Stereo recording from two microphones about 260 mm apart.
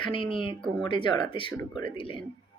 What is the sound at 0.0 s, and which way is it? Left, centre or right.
Speech, centre.